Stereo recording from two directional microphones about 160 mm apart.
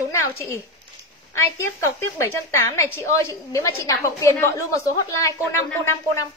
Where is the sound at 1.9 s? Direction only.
15° left (ahead or behind).